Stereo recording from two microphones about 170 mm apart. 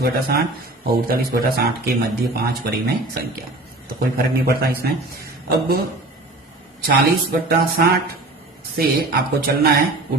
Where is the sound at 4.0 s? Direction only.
65° right (ahead or behind).